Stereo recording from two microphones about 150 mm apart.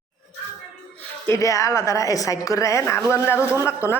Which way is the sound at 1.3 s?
20° left (ahead or behind).